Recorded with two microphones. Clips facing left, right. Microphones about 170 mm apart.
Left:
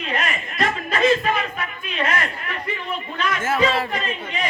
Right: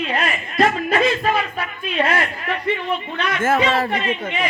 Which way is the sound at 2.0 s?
35° right (ahead or behind).